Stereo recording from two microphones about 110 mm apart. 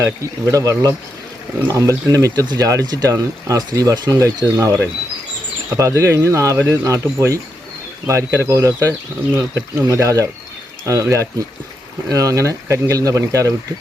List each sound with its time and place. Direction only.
0.0 s speech: 30° right (ahead or behind)
5.7 s speech: 30° right (ahead or behind)